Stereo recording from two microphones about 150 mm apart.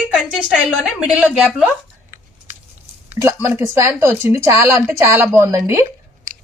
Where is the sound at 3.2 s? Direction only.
20° right (ahead or behind).